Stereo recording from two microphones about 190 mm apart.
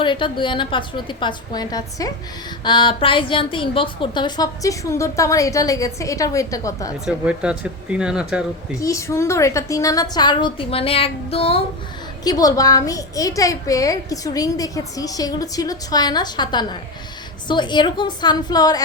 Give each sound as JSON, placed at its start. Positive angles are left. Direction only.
{"t": 0.0, "sound": "a woman's voice", "side_deg": 25}
{"t": 7.0, "sound": "speech", "side_deg": -5}
{"t": 8.8, "sound": "a woman's voice", "side_deg": 15}
{"t": 12.2, "sound": "a woman's voice", "side_deg": 20}